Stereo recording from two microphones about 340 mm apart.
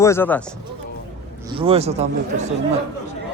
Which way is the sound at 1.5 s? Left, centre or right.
Centre.